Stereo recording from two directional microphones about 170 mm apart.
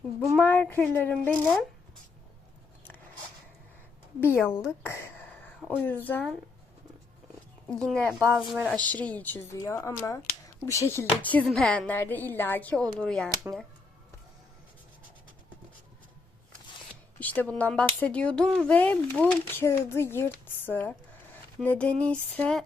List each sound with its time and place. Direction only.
0.3 s speech: 10° left (ahead or behind)
4.2 s speech: 15° left (ahead or behind)
4.9 s a sound: 10° left (ahead or behind)
5.5 s a sound: 5° right (ahead or behind)
5.8 s speech: 10° left (ahead or behind)
7.7 s speech: 5° left (ahead or behind)
17.2 s speech: 10° left (ahead or behind)